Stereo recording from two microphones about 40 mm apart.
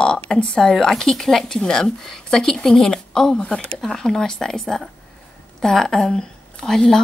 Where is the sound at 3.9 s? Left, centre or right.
Centre.